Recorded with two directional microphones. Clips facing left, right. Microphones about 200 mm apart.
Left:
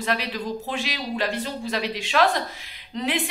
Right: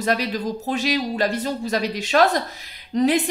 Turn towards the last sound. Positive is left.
turn(degrees=-40)  # may be behind; listen again after turning